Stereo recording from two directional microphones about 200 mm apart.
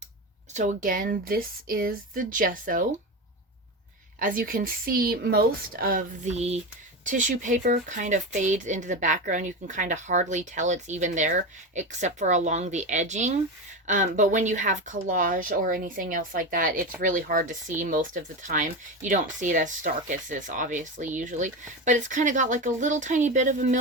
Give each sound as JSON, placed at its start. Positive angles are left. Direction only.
{"t": 0.5, "sound": "speech", "side_deg": -35}
{"t": 4.2, "sound": "speech", "side_deg": -45}